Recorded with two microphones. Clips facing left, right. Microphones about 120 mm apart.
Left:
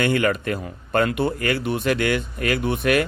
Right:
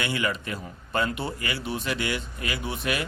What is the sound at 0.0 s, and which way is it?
Speech, 55° left (ahead or behind).